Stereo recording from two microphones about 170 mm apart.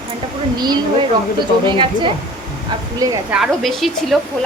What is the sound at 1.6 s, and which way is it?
Speech, 30° right (ahead or behind).